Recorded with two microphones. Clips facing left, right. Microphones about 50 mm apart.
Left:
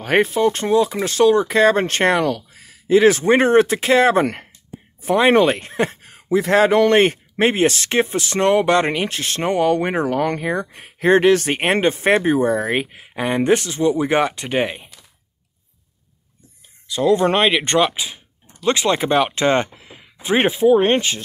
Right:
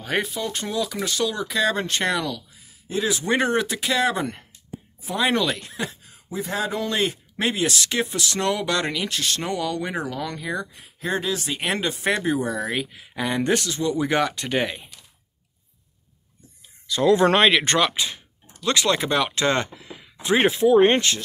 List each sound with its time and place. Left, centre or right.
0.0 s speech: left
2.5 s a sound: left
3.1 s speech: left
7.0 s speech: left; by 14.9 s centre
16.9 s speech: centre
18.6 s speech: left